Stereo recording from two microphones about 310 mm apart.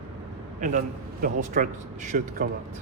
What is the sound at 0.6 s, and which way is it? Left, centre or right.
Speech, right.